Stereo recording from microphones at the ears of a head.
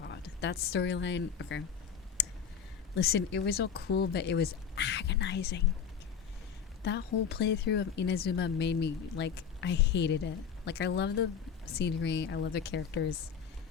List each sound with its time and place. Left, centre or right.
0.0 s speech: left
2.9 s a woman's voice: left
6.8 s a woman's voice: left